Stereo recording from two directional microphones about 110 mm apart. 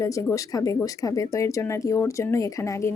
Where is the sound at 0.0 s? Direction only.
30° left (ahead or behind).